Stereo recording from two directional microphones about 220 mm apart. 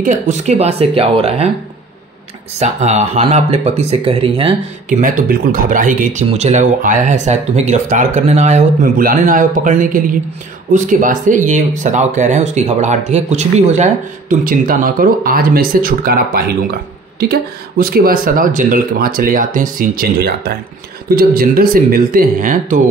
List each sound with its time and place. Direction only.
0.0 s speech: 35° right (ahead or behind)
2.6 s speech: 30° right (ahead or behind)
4.8 s speech: 35° right (ahead or behind)